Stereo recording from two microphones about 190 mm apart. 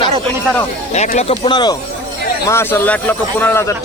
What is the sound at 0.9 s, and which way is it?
Speech, 35° left (ahead or behind).